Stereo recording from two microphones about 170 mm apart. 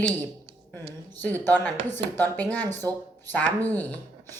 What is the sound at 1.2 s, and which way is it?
Speech, 10° left (ahead or behind).